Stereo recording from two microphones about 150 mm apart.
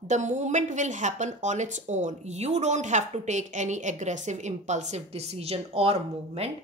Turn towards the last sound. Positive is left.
turn(degrees=-40)  # may be behind; listen again after turning